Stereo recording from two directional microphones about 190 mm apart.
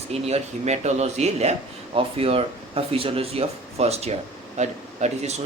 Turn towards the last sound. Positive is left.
turn(degrees=-35)  # may be behind; listen again after turning